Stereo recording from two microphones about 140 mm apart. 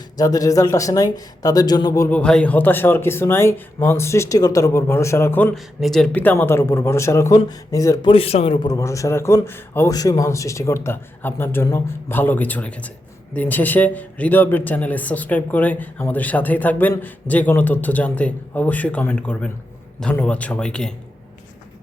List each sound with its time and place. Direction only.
0.2 s speech: 25° left (ahead or behind)
2.0 s a man's voice: 10° left (ahead or behind)
5.5 s speech: centre (ahead or behind); by 8.1 s 25° left (ahead or behind)
8.1 s a man's voice: 45° left (ahead or behind)
8.6 s a man's voice: 25° left (ahead or behind); by 20.9 s 5° left (ahead or behind)